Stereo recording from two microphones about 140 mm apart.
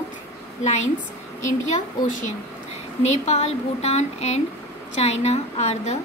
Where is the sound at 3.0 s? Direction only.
50° left (ahead or behind).